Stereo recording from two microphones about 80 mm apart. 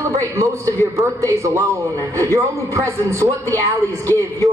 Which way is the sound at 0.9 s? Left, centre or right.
Right.